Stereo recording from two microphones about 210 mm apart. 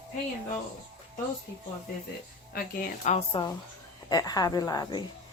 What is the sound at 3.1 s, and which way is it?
A woman's voice, 25° left (ahead or behind).